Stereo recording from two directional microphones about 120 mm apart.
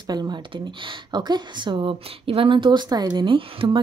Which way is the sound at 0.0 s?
35° right (ahead or behind).